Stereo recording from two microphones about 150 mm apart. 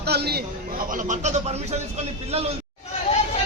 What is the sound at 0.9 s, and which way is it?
Speech, 60° right (ahead or behind).